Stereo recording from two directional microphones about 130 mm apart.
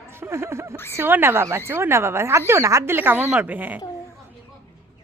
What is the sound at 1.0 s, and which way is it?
A woman's voice, 15° right (ahead or behind).